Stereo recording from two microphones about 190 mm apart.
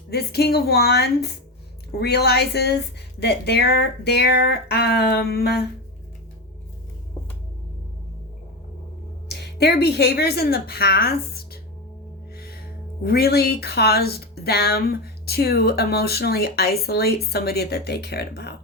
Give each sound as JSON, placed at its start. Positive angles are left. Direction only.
{"t": 0.1, "sound": "speech", "side_deg": 60}
{"t": 9.3, "sound": "a woman's voice", "side_deg": 60}
{"t": 12.3, "sound": "music", "side_deg": 55}
{"t": 13.0, "sound": "speech", "side_deg": 55}